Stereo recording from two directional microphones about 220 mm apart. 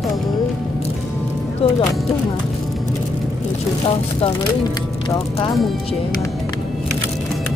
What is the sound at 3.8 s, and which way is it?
Speech, 20° left (ahead or behind).